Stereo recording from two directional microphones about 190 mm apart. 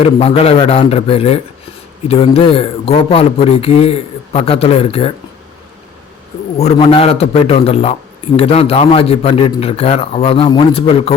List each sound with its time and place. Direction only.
0.0 s a man's voice: 30° left (ahead or behind)
6.6 s a man's voice: 30° left (ahead or behind)